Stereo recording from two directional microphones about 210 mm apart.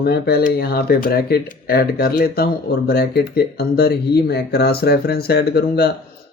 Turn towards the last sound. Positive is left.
turn(degrees=50)  # may be behind; listen again after turning